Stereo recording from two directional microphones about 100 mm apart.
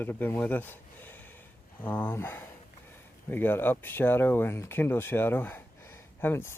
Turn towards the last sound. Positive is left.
turn(degrees=25)  # may be behind; listen again after turning